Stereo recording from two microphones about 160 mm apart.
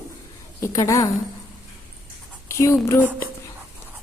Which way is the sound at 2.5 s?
15° left (ahead or behind).